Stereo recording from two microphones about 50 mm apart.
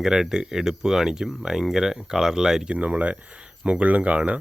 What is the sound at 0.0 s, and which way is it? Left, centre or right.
Speech, centre.